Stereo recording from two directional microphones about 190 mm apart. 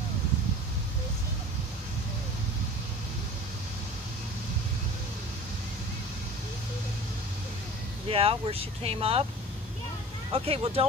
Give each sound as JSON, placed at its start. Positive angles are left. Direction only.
{"t": 8.1, "sound": "speech", "side_deg": -30}
{"t": 10.3, "sound": "speech", "side_deg": -30}